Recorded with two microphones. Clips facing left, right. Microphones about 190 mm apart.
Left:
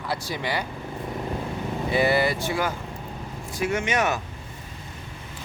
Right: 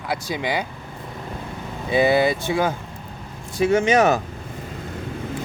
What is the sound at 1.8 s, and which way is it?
Speech, 20° right (ahead or behind).